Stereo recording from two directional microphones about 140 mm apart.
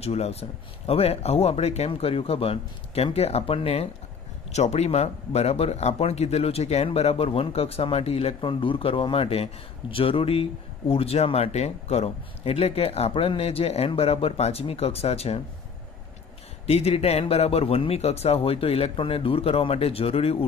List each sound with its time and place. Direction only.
0.0 s a man's voice: 50° left (ahead or behind)
16.6 s a man's voice: 45° left (ahead or behind)